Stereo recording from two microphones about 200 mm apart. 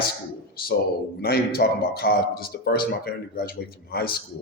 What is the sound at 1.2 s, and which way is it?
Speech, 50° left (ahead or behind).